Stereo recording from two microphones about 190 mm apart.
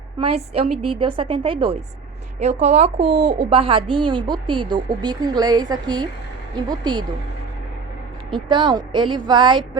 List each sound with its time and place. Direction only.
0.2 s a woman's voice: 30° right (ahead or behind)
3.0 s speech: 60° right (ahead or behind)
3.5 s a woman's voice: 30° right (ahead or behind)
8.3 s a woman's voice: 25° right (ahead or behind)